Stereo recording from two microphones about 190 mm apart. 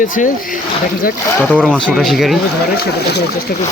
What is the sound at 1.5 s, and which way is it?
Speech, centre (ahead or behind).